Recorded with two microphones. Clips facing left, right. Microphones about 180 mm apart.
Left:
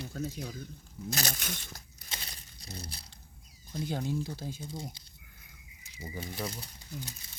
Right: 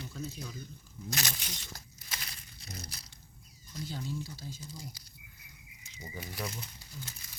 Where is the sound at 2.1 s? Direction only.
30° left (ahead or behind).